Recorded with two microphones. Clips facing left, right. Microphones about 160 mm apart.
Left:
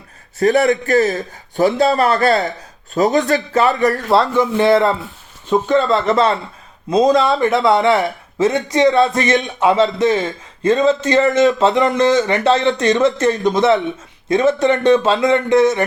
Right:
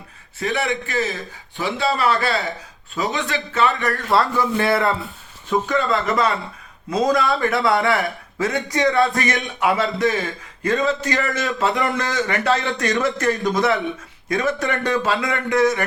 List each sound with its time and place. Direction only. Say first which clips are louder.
0.3 s a man's voice: left 10 dB; 45° left (ahead or behind)
4.1 s speech: left 1 dB; 20° left (ahead or behind)